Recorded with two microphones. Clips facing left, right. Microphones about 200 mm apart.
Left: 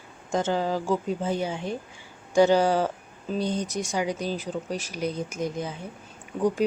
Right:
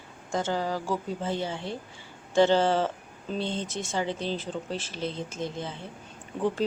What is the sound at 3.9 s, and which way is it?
Speech, 10° left (ahead or behind).